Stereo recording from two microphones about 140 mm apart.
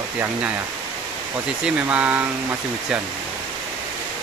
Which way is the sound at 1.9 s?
10° right (ahead or behind).